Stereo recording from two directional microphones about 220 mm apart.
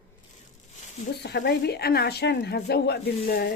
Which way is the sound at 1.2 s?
50° left (ahead or behind).